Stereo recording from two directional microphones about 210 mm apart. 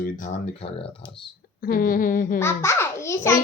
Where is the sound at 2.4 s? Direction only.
10° left (ahead or behind).